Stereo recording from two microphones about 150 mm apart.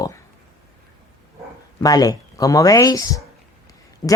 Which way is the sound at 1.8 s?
25° left (ahead or behind).